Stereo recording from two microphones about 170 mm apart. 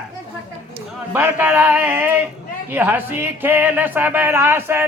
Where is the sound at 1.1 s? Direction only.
10° right (ahead or behind).